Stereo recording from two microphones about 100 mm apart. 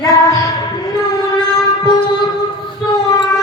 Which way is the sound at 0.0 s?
35° left (ahead or behind).